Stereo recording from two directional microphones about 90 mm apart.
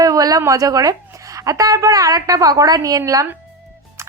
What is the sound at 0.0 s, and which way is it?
A woman's voice, 45° right (ahead or behind).